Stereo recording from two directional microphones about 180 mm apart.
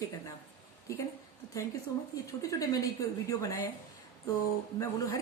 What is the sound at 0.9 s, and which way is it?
Speech, 15° left (ahead or behind).